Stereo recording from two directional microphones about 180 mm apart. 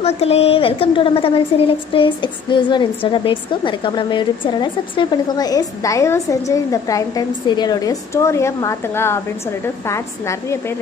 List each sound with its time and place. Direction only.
0.0 s a woman's voice: 35° left (ahead or behind); by 10.6 s 15° left (ahead or behind)